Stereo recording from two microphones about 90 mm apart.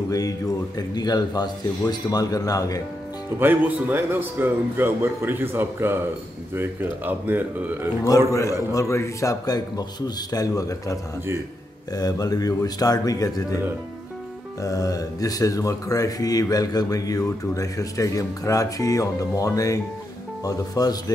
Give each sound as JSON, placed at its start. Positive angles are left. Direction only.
{"t": 0.7, "sound": "speech", "side_deg": 50}
{"t": 3.3, "sound": "speech", "side_deg": -25}
{"t": 8.3, "sound": "speech", "side_deg": 35}
{"t": 14.6, "sound": "speech", "side_deg": 40}